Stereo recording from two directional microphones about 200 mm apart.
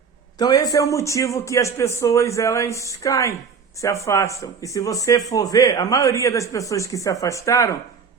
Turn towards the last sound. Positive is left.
turn(degrees=15)  # may be behind; listen again after turning